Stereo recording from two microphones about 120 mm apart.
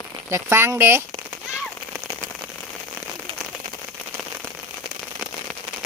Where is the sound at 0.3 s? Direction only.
20° right (ahead or behind).